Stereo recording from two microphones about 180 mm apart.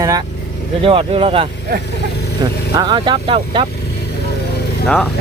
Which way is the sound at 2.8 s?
25° right (ahead or behind).